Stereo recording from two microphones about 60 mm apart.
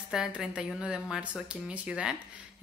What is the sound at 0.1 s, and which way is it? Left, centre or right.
A woman's voice, centre.